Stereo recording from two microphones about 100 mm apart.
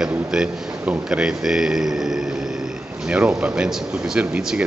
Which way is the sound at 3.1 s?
10° right (ahead or behind).